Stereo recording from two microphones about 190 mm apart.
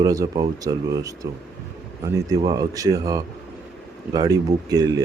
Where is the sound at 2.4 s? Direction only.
20° right (ahead or behind).